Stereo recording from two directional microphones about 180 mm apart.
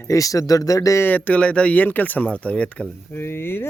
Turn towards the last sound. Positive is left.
turn(degrees=15)  # may be behind; listen again after turning